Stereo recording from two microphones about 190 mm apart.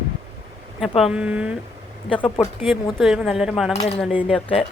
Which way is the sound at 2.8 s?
Centre (ahead or behind).